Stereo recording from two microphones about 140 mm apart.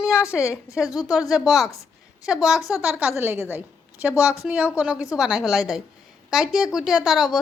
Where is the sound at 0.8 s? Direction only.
25° left (ahead or behind).